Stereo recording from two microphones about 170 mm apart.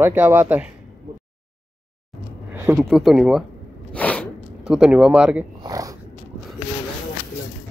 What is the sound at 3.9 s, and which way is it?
Sneeze, 10° left (ahead or behind).